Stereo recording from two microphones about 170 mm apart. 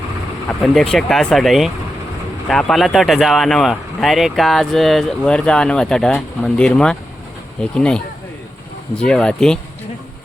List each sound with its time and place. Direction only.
0.6 s speech: 5° left (ahead or behind)